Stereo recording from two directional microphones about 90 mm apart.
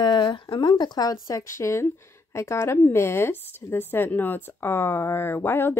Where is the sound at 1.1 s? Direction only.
35° left (ahead or behind).